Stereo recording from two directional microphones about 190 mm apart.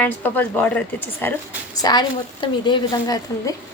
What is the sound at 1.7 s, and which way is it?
A woman's voice, 20° left (ahead or behind).